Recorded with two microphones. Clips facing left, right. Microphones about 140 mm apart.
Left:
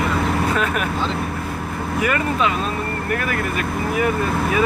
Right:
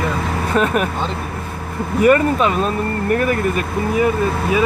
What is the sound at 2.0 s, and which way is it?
Speech, 40° right (ahead or behind).